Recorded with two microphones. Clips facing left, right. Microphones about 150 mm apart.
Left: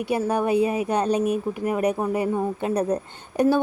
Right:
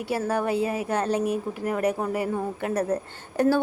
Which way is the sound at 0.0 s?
15° left (ahead or behind).